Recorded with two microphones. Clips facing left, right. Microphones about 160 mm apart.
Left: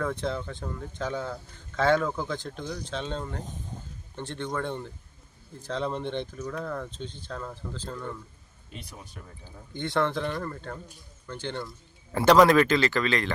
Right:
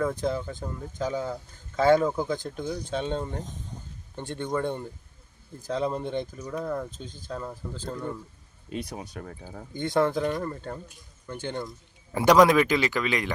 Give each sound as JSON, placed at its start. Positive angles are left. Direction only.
{"t": 0.0, "sound": "a man's voice", "side_deg": -10}
{"t": 7.0, "sound": "speech", "side_deg": -40}
{"t": 7.3, "sound": "a man's voice", "side_deg": -10}
{"t": 8.9, "sound": "speech", "side_deg": -75}
{"t": 9.4, "sound": "speech", "side_deg": -60}
{"t": 9.9, "sound": "a man's voice", "side_deg": -10}